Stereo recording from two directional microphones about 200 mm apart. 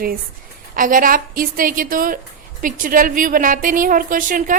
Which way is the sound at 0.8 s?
45° right (ahead or behind).